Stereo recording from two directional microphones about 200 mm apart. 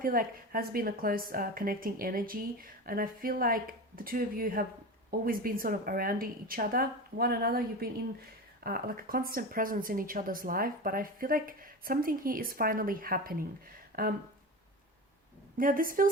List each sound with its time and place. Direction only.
0.0 s speech: 45° right (ahead or behind)
15.5 s speech: 45° right (ahead or behind)